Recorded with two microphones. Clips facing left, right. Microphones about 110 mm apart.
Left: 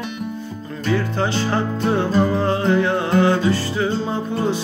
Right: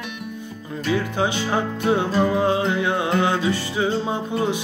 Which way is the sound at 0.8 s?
10° right (ahead or behind).